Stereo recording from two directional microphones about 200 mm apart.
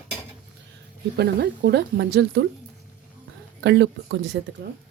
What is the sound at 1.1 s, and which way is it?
Speech, 55° right (ahead or behind).